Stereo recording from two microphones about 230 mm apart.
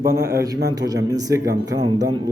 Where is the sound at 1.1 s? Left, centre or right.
Centre.